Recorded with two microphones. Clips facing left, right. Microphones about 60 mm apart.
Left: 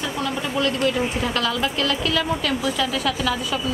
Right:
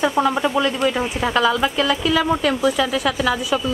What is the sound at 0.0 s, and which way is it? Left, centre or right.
Speech, right.